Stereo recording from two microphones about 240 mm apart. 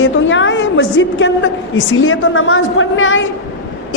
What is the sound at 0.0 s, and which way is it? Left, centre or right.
A woman's voice, left.